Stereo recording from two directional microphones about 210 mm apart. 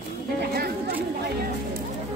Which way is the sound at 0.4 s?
50° right (ahead or behind).